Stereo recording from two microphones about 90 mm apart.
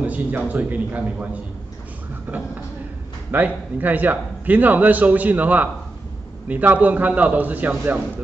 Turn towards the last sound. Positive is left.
turn(degrees=-20)  # may be behind; listen again after turning